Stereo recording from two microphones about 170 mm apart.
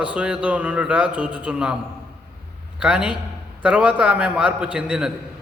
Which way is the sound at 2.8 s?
5° right (ahead or behind).